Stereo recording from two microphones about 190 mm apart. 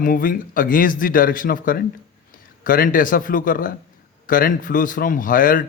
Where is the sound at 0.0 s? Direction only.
50° left (ahead or behind).